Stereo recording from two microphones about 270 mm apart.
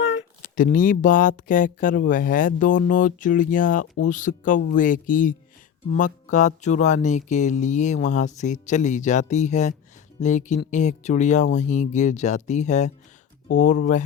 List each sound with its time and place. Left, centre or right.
0.0 s speech: left